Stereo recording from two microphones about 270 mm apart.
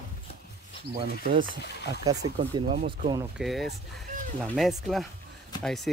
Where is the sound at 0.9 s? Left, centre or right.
Right.